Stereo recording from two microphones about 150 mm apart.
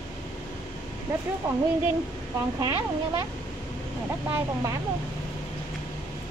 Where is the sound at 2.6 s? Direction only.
25° right (ahead or behind).